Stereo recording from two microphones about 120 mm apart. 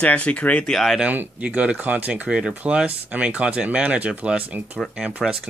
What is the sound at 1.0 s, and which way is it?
Speech, 15° right (ahead or behind).